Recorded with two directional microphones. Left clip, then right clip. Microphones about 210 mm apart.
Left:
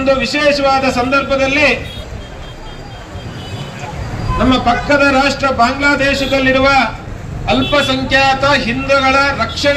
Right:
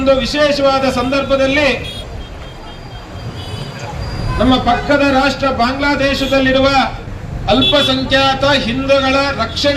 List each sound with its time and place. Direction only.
0.0 s a man's voice: 25° left (ahead or behind)
4.4 s a man's voice: 25° left (ahead or behind)